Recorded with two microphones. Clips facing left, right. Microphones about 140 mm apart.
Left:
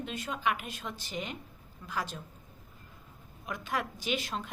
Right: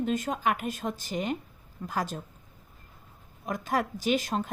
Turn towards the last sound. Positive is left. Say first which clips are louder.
# right 7 dB
turn(degrees=-45)  # may be behind; listen again after turning